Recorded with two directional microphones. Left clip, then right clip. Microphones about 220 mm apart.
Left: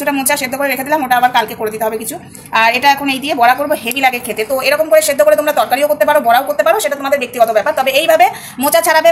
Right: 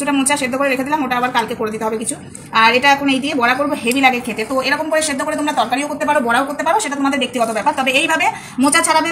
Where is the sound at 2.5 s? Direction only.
45° left (ahead or behind).